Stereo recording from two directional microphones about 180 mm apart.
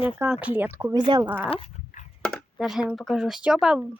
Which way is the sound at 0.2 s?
10° right (ahead or behind).